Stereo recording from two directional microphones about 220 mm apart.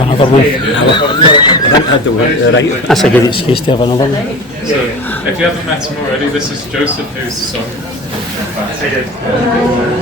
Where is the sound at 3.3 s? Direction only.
25° left (ahead or behind).